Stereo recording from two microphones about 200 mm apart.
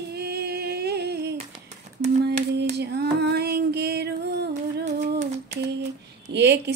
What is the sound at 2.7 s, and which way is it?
Female singing, 55° right (ahead or behind).